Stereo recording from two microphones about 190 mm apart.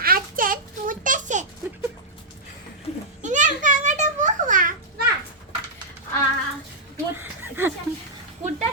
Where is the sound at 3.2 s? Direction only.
40° right (ahead or behind).